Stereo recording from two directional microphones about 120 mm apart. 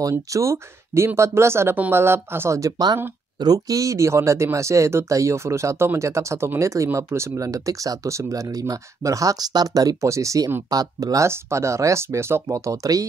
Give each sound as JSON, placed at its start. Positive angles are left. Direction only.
{"t": 0.1, "sound": "speech", "side_deg": -25}